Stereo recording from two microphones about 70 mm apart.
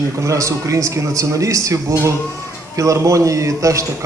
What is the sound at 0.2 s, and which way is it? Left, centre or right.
A man's voice, right.